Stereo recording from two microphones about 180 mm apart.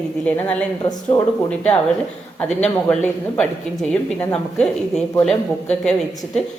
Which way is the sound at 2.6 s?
5° left (ahead or behind).